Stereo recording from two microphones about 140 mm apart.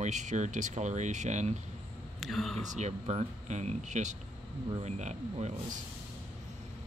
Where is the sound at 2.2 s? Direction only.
Centre (ahead or behind).